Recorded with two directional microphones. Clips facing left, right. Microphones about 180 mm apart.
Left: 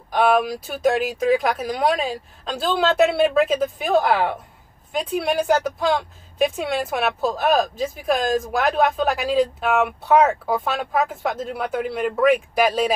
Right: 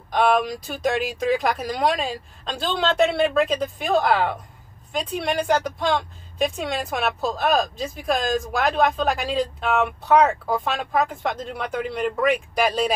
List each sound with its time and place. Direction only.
0.1 s a woman's voice: 5° left (ahead or behind)